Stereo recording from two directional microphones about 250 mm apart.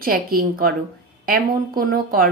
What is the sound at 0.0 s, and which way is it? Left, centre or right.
Speech, right.